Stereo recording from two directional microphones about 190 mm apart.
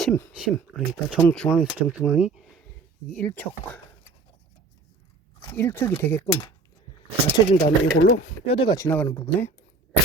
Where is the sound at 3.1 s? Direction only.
10° left (ahead or behind).